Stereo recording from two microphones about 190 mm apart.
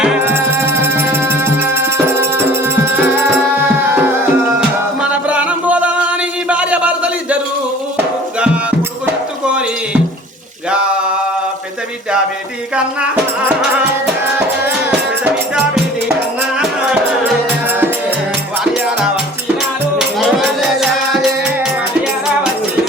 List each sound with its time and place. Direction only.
0.0 s music: 10° right (ahead or behind)
4.9 s a sound: 5° right (ahead or behind)
14.8 s music: 5° right (ahead or behind)
20.0 s music: 5° right (ahead or behind)